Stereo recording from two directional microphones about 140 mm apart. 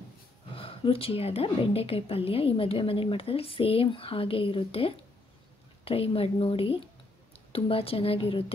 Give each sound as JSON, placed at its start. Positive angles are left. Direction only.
{"t": 0.6, "sound": "a woman's voice", "side_deg": 40}